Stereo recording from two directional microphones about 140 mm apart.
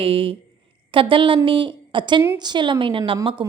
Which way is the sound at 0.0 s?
40° right (ahead or behind).